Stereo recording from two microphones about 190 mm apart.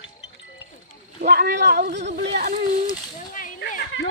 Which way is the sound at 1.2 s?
55° right (ahead or behind).